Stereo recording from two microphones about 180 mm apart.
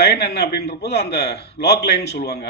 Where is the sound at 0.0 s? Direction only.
65° left (ahead or behind).